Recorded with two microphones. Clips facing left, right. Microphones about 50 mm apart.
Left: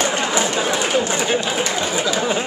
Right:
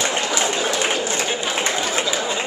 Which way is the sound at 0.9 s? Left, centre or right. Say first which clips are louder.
Left 4 dB; centre.